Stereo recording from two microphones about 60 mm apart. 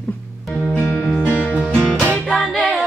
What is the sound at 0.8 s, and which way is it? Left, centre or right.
Music, left.